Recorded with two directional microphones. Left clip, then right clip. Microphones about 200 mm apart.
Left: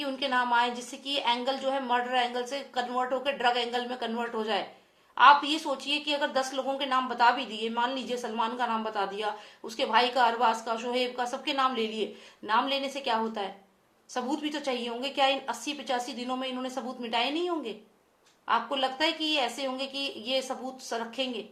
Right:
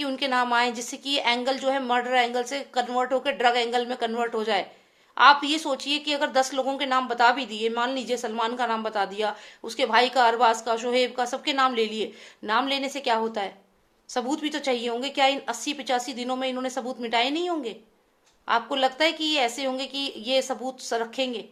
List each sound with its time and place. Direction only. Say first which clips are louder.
0.0 s a woman's voice: right 3 dB; 45° right (ahead or behind)